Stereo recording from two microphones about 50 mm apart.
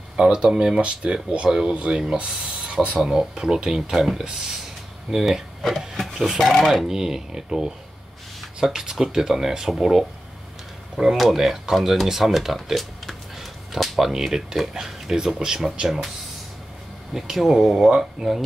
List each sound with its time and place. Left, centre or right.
0.2 s speech: centre
3.0 s speech: centre
6.9 s speech: centre
17.1 s speech: centre